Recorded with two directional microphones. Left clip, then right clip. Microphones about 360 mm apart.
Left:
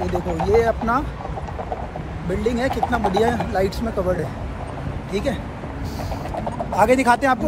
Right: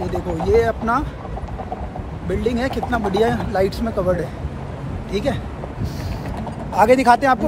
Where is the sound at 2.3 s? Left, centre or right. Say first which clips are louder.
Even; centre.